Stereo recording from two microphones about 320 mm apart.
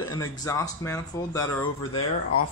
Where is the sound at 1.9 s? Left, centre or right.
Left.